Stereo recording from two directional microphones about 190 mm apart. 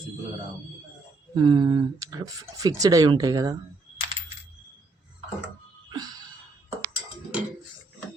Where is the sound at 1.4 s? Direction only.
25° right (ahead or behind).